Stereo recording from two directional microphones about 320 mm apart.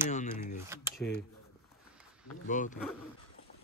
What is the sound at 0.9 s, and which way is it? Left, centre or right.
Speech, left.